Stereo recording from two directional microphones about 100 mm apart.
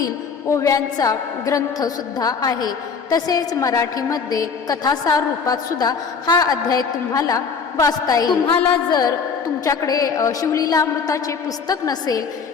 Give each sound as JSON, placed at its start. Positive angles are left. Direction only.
{"t": 0.5, "sound": "a woman's voice", "side_deg": 35}